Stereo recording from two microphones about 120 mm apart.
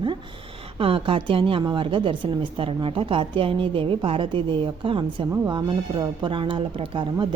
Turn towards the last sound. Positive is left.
turn(degrees=-45)  # may be behind; listen again after turning